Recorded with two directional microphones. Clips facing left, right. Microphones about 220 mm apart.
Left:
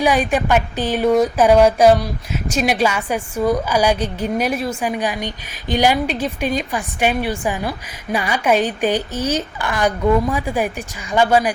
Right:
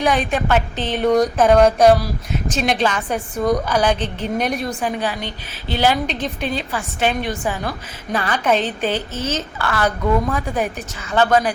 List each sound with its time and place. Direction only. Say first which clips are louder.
0.0 s a woman's voice: left 2 dB; 10° left (ahead or behind)